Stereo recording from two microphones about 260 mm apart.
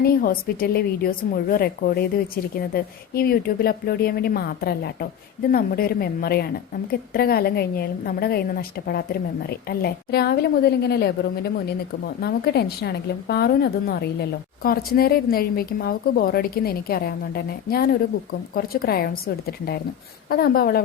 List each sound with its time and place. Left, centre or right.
0.0 s a woman's voice: left